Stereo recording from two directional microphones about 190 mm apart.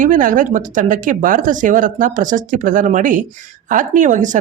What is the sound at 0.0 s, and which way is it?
Speech, 45° right (ahead or behind).